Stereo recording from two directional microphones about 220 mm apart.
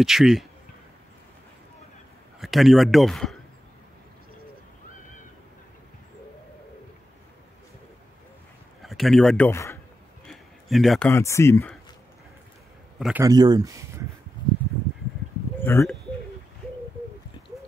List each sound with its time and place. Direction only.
0.0 s speech: centre (ahead or behind)
2.4 s speech: centre (ahead or behind)
8.8 s speech: centre (ahead or behind)
10.2 s a sound: centre (ahead or behind)
11.1 s speech: 15° left (ahead or behind)
13.2 s speech: 15° right (ahead or behind)
15.6 s speech: 10° left (ahead or behind)